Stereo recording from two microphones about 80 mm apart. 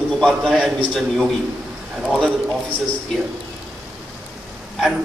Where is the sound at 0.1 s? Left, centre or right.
Centre.